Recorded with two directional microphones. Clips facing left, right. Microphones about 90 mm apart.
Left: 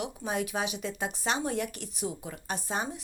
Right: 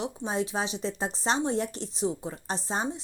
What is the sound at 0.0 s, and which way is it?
A woman's voice, 30° right (ahead or behind).